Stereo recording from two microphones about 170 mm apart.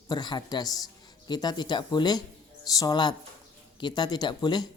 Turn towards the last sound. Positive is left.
turn(degrees=25)  # may be behind; listen again after turning